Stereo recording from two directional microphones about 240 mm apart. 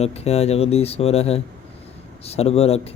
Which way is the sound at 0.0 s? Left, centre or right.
Left.